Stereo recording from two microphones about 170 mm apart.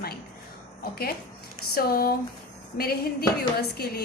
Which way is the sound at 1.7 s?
60° left (ahead or behind).